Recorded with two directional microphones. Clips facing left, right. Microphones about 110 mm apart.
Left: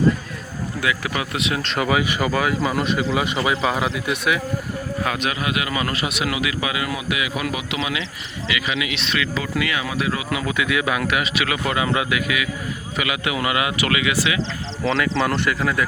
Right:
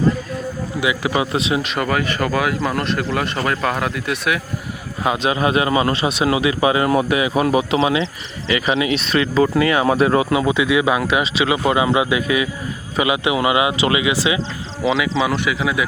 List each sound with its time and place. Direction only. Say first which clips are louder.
0.8 s speech: right 5 dB; 20° right (ahead or behind)
1.6 s speech: even; centre (ahead or behind)
5.0 s a man's voice: right 8 dB; 25° right (ahead or behind)
10.3 s speech: right 6 dB; 25° right (ahead or behind)
14.8 s speech: right 2 dB; 5° right (ahead or behind)